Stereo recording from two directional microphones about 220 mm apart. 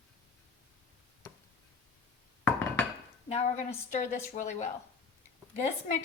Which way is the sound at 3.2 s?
30° left (ahead or behind).